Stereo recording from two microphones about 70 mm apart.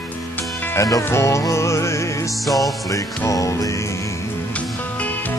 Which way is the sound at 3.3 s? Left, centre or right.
Left.